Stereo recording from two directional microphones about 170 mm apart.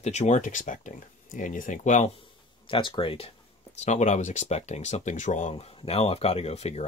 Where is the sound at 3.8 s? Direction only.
45° left (ahead or behind).